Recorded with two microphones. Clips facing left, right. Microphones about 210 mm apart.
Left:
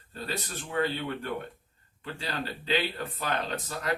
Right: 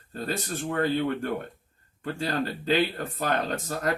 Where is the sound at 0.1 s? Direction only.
45° right (ahead or behind).